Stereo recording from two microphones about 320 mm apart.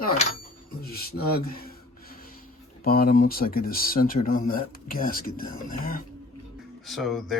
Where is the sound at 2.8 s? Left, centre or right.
Left.